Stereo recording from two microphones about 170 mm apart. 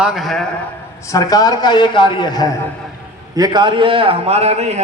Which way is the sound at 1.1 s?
20° left (ahead or behind).